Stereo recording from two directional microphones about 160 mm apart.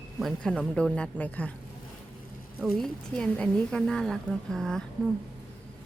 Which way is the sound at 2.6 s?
5° left (ahead or behind).